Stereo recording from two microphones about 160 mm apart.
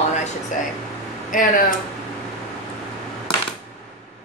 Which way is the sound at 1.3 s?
60° left (ahead or behind).